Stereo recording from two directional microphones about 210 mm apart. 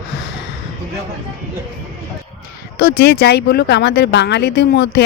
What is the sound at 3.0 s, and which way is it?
Speech, 50° left (ahead or behind).